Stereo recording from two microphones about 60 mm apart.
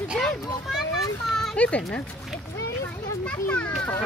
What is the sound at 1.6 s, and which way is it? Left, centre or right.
Speech, left.